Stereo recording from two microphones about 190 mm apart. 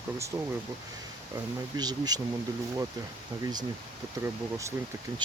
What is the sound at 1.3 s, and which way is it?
Speech, 20° right (ahead or behind).